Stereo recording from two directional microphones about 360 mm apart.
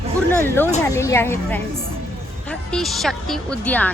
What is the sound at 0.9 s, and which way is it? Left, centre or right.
Speech, centre.